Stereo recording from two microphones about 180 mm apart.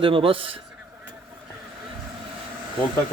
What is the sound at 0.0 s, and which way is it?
Speech, 30° right (ahead or behind).